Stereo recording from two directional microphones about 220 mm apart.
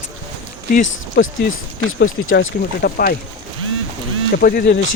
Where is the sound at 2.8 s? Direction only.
45° left (ahead or behind).